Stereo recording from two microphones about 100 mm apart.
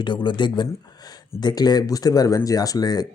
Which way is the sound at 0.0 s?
55° left (ahead or behind).